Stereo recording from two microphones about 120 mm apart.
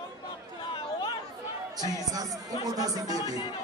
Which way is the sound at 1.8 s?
30° right (ahead or behind).